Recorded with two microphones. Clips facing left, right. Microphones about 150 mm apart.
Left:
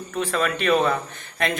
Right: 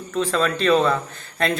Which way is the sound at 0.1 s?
10° left (ahead or behind).